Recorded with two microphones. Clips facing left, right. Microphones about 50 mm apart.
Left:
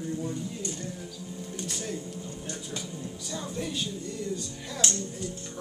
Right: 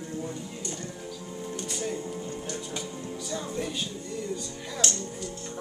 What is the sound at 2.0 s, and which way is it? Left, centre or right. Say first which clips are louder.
Speech: right 4 dB; right.